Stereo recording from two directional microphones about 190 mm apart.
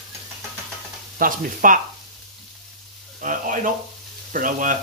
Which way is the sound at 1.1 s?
45° right (ahead or behind).